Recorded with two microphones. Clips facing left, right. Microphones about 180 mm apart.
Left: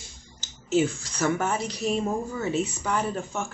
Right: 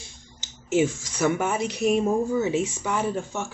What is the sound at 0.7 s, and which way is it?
Speech, 10° right (ahead or behind).